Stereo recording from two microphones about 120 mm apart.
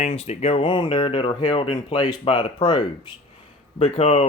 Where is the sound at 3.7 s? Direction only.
60° left (ahead or behind).